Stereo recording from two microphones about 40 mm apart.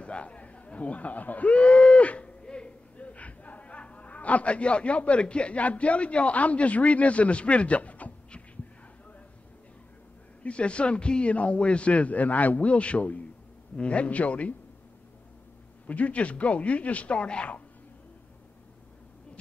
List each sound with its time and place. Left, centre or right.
0.0 s speech: left
1.5 s speech: left
2.0 s a sound: left
2.4 s speech: left
10.4 s a man's voice: left
15.9 s a man's voice: left